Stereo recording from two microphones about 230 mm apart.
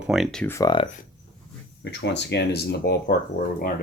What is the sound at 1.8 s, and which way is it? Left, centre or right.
Speech, left.